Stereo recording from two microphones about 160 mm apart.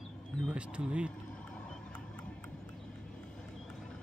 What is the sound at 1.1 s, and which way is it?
Vehicle, 5° left (ahead or behind).